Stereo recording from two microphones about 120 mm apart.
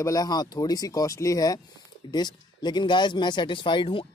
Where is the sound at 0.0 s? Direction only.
30° left (ahead or behind).